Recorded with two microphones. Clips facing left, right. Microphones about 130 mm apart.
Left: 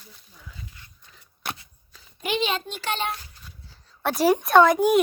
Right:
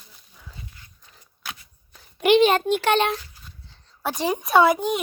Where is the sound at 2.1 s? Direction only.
70° right (ahead or behind).